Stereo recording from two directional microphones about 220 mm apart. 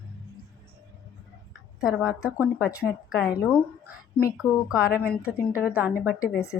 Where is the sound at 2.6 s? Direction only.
15° left (ahead or behind).